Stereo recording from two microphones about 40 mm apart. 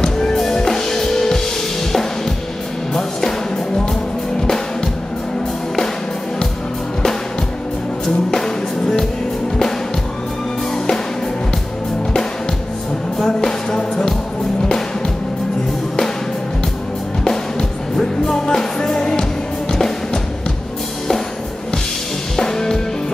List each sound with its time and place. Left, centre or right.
0.0 s music: centre
2.9 s music: centre
8.3 s music: centre
13.2 s music: centre
17.2 s music: centre
22.4 s music: centre